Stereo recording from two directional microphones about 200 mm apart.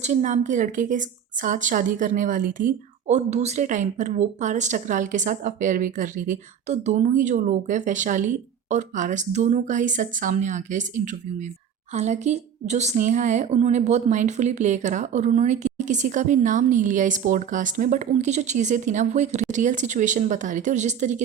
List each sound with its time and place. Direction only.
0.0 s a woman's voice: 35° right (ahead or behind)